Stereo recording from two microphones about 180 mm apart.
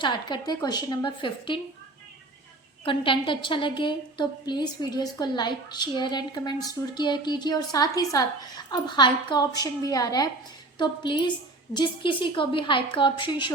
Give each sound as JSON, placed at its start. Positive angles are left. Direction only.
{"t": 0.0, "sound": "a woman's voice", "side_deg": 25}
{"t": 2.8, "sound": "a woman's voice", "side_deg": 30}